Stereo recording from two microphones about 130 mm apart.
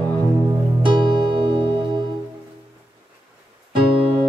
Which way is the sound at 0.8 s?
35° right (ahead or behind).